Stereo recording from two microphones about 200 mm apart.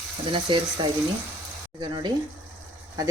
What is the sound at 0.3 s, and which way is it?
A woman's voice, 25° right (ahead or behind).